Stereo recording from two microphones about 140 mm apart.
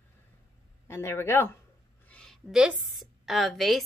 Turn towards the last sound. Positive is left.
turn(degrees=0)  # may be behind; listen again after turning